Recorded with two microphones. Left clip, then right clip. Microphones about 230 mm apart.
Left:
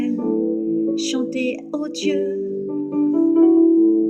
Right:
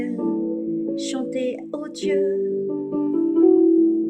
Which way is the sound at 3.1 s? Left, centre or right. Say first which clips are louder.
Left 2 dB; left.